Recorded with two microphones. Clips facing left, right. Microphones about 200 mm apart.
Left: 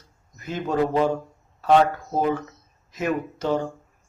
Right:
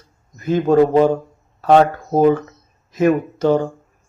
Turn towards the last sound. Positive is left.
turn(degrees=-50)  # may be behind; listen again after turning